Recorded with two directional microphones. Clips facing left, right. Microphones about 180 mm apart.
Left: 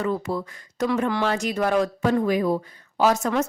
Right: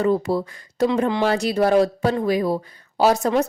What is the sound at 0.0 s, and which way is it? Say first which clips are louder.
Speech: right 6 dB; 35° right (ahead or behind).